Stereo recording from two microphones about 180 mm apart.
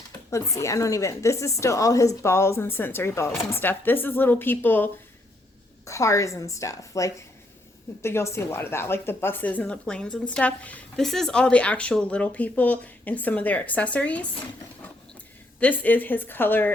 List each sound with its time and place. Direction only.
0.3 s speech: 15° left (ahead or behind)
15.6 s speech: 10° left (ahead or behind)